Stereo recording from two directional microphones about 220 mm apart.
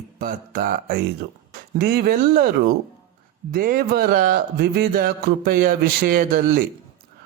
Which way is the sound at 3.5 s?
40° right (ahead or behind).